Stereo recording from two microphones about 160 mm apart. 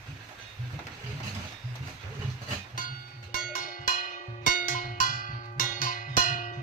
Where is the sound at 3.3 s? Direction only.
60° left (ahead or behind).